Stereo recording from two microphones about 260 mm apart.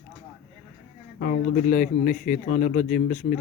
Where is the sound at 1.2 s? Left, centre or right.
Left.